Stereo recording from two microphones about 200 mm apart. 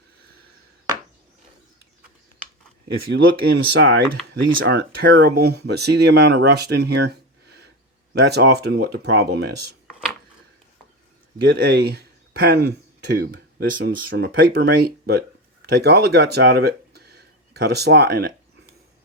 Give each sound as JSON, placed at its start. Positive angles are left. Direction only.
{"t": 2.9, "sound": "speech", "side_deg": -55}
{"t": 11.4, "sound": "speech", "side_deg": -55}